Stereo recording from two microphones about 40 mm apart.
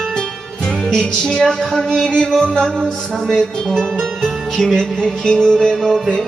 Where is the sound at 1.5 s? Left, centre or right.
Centre.